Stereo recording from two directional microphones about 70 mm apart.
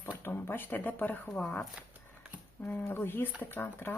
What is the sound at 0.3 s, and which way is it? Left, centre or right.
Speech, left.